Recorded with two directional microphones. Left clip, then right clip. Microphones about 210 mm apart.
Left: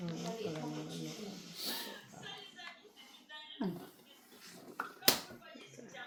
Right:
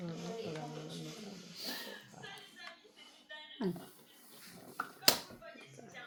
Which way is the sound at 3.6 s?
40° right (ahead or behind).